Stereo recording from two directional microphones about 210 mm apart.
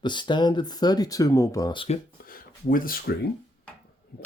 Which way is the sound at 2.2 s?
45° left (ahead or behind).